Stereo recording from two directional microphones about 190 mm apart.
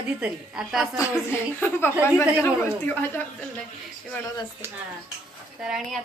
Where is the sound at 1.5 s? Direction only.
10° left (ahead or behind).